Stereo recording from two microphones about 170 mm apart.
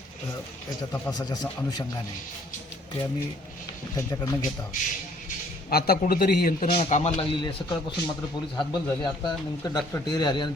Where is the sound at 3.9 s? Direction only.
20° left (ahead or behind).